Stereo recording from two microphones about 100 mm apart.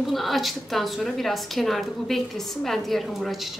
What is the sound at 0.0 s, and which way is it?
A woman's voice, centre (ahead or behind).